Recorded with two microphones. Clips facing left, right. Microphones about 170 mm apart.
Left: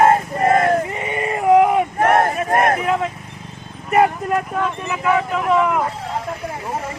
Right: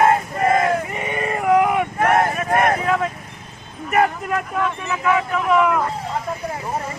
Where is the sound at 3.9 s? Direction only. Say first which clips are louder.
Left 3 dB; 25° left (ahead or behind).